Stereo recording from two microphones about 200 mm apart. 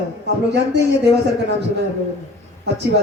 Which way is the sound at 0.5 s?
60° right (ahead or behind).